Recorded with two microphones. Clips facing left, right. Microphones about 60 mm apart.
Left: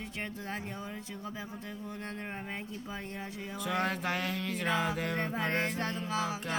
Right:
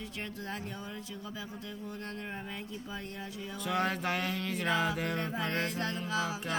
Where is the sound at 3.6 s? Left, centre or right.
Centre.